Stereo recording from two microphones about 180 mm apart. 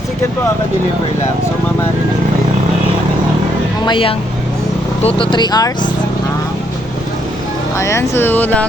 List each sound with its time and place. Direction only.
3.8 s speech: 30° left (ahead or behind)
7.8 s speech: 15° left (ahead or behind)